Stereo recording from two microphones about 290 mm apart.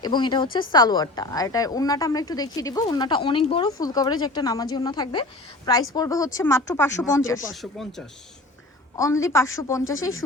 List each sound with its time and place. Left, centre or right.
0.0 s a woman's voice: centre